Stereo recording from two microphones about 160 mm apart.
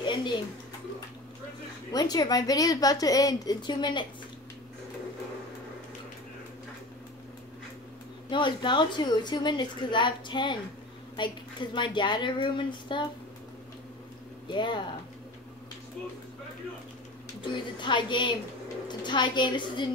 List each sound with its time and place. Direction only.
0.0 s a sound: 30° left (ahead or behind)
1.9 s a woman's voice: 25° left (ahead or behind)
8.3 s a woman's voice: 30° left (ahead or behind)
14.5 s a woman's voice: 30° left (ahead or behind)
17.4 s a woman's voice: 30° left (ahead or behind)